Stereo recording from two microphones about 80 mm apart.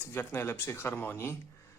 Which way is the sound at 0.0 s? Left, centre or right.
Left.